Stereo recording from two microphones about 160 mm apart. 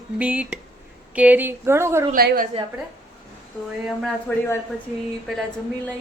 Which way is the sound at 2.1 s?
65° right (ahead or behind).